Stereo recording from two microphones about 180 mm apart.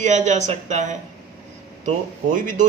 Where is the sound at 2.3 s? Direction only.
45° right (ahead or behind).